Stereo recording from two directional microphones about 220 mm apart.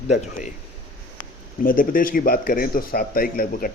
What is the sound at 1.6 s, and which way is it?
Speech, 40° left (ahead or behind).